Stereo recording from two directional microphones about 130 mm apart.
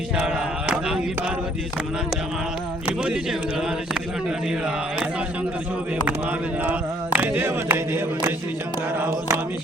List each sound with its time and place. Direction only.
2.8 s speech: 5° right (ahead or behind)
6.7 s chant: 15° right (ahead or behind)